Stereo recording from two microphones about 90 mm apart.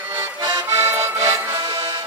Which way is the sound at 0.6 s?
25° right (ahead or behind).